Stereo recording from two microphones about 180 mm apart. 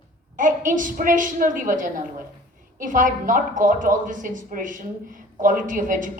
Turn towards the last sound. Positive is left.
turn(degrees=-45)  # may be behind; listen again after turning